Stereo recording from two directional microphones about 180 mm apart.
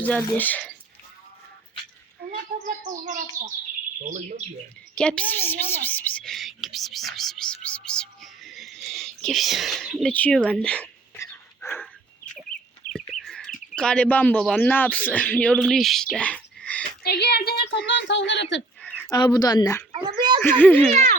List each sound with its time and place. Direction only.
0.0 s speech: 10° left (ahead or behind)
2.5 s bird: 45° right (ahead or behind)
4.9 s a woman's voice: 5° left (ahead or behind)
12.9 s chicken: centre (ahead or behind)
13.7 s speech: 5° left (ahead or behind)
17.0 s speech: 65° left (ahead or behind); by 18.6 s 85° left
19.1 s speech: 20° left (ahead or behind)
19.9 s a child's voice: 25° right (ahead or behind)
20.4 s speech: 10° left (ahead or behind)
20.9 s speech: 40° right (ahead or behind)